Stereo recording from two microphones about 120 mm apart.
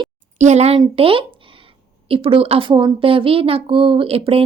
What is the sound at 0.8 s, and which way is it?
A woman's voice, 50° right (ahead or behind).